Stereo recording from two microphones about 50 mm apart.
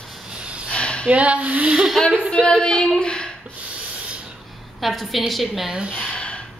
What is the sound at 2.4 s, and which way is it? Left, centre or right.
Female singing, centre.